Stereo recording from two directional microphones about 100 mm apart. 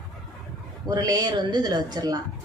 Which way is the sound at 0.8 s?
40° right (ahead or behind).